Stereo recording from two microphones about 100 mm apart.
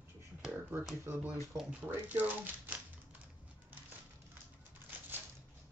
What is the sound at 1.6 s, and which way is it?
Speech, 15° right (ahead or behind).